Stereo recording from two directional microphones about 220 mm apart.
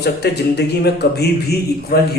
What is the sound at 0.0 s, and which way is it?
A man's voice, 50° left (ahead or behind).